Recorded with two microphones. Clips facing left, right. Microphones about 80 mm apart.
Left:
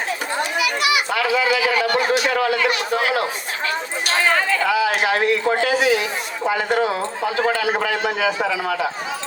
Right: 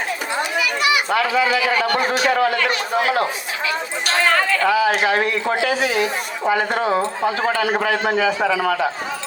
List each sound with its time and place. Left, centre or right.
0.5 s a child's voice: right
4.3 s speech: centre
5.0 s speech: right